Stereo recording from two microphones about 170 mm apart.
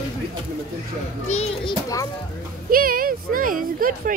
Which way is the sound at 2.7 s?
60° right (ahead or behind).